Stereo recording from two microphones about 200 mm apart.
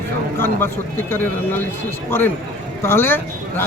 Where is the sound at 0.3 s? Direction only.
10° left (ahead or behind).